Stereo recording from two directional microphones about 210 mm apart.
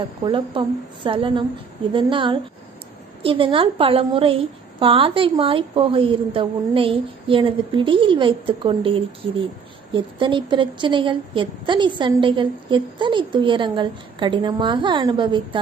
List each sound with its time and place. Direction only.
0.3 s a woman's voice: 25° right (ahead or behind)